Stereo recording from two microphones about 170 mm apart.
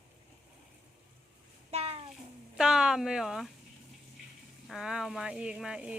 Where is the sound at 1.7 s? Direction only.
35° right (ahead or behind).